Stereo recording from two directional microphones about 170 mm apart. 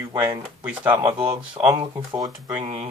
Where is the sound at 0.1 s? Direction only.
20° right (ahead or behind).